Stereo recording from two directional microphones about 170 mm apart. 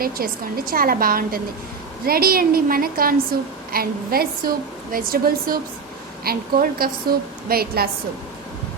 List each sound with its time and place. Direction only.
0.0 s a woman's voice: 60° right (ahead or behind)